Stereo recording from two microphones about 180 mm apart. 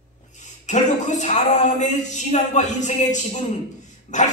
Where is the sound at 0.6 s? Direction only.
40° left (ahead or behind).